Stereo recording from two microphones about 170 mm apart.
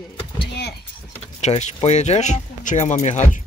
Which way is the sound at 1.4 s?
40° left (ahead or behind).